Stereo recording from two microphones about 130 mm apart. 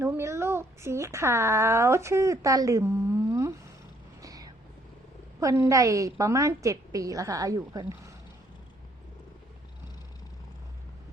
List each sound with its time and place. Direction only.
0.0 s speech: 20° right (ahead or behind)
4.2 s vehicle: 30° right (ahead or behind)
5.4 s speech: 25° right (ahead or behind)